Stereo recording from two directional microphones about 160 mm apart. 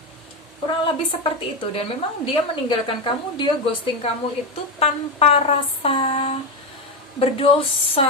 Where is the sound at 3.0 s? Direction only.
30° left (ahead or behind).